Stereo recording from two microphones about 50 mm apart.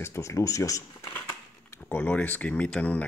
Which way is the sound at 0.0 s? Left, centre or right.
Left.